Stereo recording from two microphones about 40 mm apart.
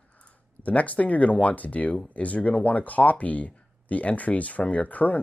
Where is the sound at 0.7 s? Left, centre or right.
Left.